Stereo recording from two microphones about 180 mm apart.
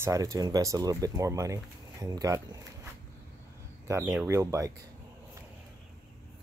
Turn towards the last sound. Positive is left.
turn(degrees=-15)  # may be behind; listen again after turning